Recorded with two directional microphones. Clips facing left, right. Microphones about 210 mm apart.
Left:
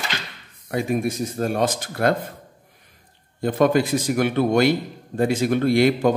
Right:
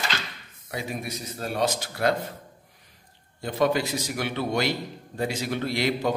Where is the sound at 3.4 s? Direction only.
50° left (ahead or behind).